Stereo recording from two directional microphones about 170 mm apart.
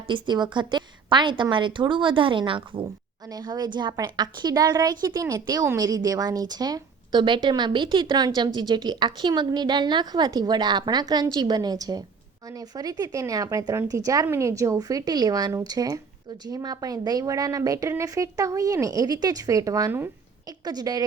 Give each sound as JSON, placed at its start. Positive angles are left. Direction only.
{"t": 0.1, "sound": "a woman's voice", "side_deg": -25}